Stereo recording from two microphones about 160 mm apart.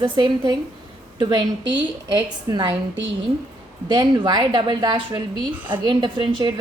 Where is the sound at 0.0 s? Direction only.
30° right (ahead or behind).